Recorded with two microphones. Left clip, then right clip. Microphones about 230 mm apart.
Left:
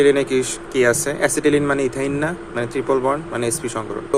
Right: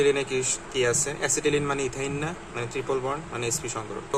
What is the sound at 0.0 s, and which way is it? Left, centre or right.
Speech, centre.